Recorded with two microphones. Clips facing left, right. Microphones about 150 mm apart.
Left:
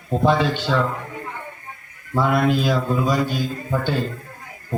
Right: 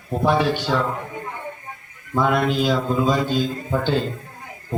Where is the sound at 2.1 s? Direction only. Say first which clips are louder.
Left 1 dB; 15° right (ahead or behind).